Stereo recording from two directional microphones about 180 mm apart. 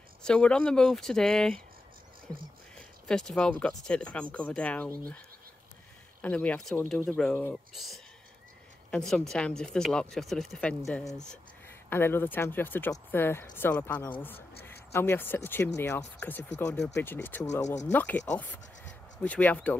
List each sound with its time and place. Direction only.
0.2 s speech: 5° left (ahead or behind)
2.7 s speech: 5° left (ahead or behind)
6.2 s speech: 5° left (ahead or behind)